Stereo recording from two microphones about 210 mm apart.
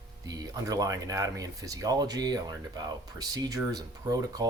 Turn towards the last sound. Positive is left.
turn(degrees=-15)  # may be behind; listen again after turning